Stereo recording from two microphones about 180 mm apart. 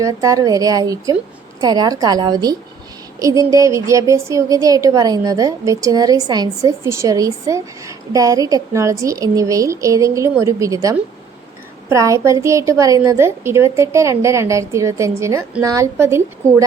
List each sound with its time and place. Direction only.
0.0 s a woman's voice: 20° right (ahead or behind)